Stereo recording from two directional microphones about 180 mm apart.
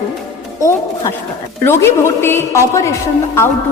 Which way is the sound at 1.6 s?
15° left (ahead or behind).